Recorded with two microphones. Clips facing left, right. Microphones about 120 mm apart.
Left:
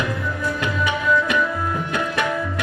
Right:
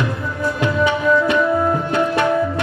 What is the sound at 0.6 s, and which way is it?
Tabla, 25° right (ahead or behind).